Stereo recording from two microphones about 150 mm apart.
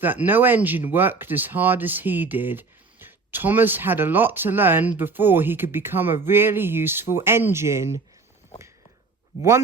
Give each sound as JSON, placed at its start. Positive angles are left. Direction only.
{"t": 0.0, "sound": "speech", "side_deg": -15}